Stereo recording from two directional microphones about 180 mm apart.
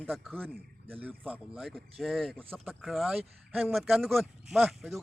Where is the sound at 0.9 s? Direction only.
10° right (ahead or behind).